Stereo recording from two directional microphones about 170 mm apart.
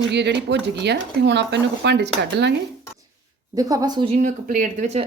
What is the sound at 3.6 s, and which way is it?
Speech, 25° right (ahead or behind).